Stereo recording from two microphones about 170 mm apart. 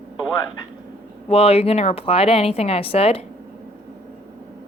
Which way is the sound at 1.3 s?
35° left (ahead or behind).